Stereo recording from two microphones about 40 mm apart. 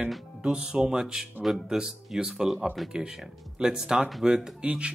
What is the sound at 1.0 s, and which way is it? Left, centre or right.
Speech, centre.